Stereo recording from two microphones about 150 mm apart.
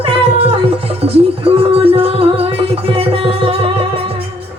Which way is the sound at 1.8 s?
40° right (ahead or behind).